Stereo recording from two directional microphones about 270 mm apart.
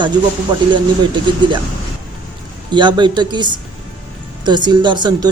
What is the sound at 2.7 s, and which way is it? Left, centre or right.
Speech, centre.